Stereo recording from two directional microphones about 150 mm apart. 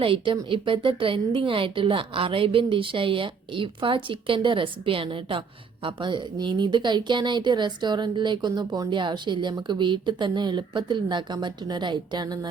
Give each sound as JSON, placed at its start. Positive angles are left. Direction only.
{"t": 0.0, "sound": "a woman's voice", "side_deg": -35}